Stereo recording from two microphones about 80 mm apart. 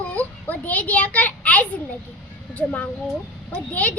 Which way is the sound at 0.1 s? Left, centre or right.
Centre.